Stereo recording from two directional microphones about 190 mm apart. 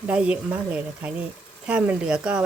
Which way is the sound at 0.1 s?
5° right (ahead or behind).